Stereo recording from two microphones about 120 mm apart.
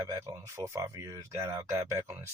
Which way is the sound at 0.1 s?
25° right (ahead or behind).